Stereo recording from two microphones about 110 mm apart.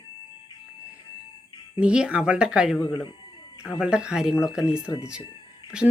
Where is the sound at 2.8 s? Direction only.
35° left (ahead or behind).